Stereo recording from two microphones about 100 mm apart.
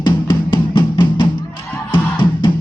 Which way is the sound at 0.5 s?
55° left (ahead or behind).